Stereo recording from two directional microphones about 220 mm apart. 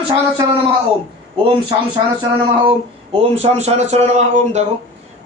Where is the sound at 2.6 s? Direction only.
25° right (ahead or behind).